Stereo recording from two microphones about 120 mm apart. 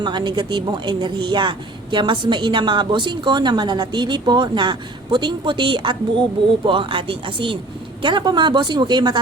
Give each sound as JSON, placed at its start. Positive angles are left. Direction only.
{"t": 0.0, "sound": "a woman's voice", "side_deg": -40}